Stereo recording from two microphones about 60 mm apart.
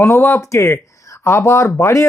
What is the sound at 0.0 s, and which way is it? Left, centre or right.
Speech, left.